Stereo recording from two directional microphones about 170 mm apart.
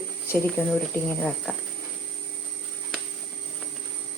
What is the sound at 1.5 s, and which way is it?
Speech, 10° left (ahead or behind).